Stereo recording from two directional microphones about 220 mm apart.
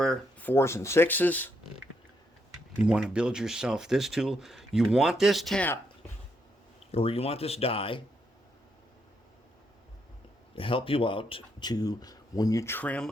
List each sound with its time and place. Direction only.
0.0 s speech: 5° left (ahead or behind)
2.8 s speech: 5° right (ahead or behind)
6.9 s speech: 25° left (ahead or behind)
10.5 s speech: 25° left (ahead or behind); by 13.1 s 5° left (ahead or behind)